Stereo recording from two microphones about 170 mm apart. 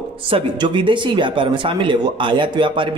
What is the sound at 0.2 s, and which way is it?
Speech, 30° right (ahead or behind).